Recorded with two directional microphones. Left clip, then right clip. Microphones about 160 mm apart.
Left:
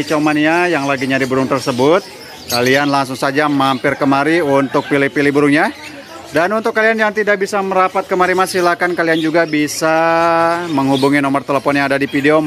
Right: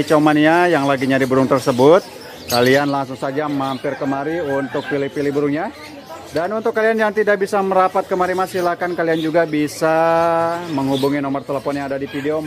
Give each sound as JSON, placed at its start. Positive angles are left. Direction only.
{"t": 0.1, "sound": "speech", "side_deg": -10}
{"t": 2.9, "sound": "speech", "side_deg": 15}
{"t": 6.6, "sound": "speech", "side_deg": 5}
{"t": 8.1, "sound": "speech", "side_deg": 10}